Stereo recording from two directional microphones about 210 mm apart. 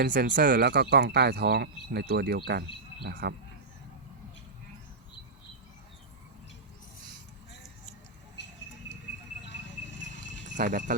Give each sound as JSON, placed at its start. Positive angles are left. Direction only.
{"t": 0.0, "sound": "speech", "side_deg": -40}
{"t": 9.8, "sound": "a sound", "side_deg": 60}
{"t": 10.6, "sound": "insect", "side_deg": -40}